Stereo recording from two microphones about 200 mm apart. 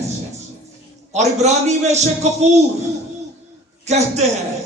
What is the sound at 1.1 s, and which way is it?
Speech, 35° right (ahead or behind).